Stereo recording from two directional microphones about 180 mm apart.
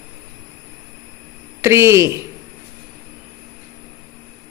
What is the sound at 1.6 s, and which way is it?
Speech, 15° right (ahead or behind).